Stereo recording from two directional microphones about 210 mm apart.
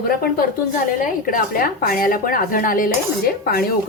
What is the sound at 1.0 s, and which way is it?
A woman's voice, 40° left (ahead or behind).